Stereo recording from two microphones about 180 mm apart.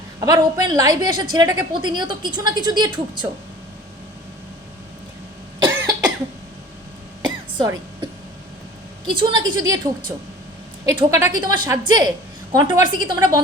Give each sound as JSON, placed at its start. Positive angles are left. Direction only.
{"t": 0.2, "sound": "a woman's voice", "side_deg": -20}
{"t": 5.6, "sound": "cough", "side_deg": -20}
{"t": 7.2, "sound": "a sound", "side_deg": -25}
{"t": 9.0, "sound": "a woman's voice", "side_deg": -25}
{"t": 10.8, "sound": "a woman's voice", "side_deg": -25}